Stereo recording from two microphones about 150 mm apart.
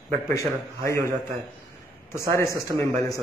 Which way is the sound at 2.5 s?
20° left (ahead or behind).